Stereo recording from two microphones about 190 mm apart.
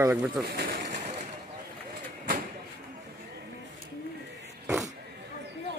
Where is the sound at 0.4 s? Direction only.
55° right (ahead or behind).